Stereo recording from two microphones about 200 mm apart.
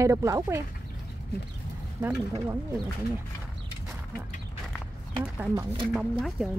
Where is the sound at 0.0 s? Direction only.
15° right (ahead or behind).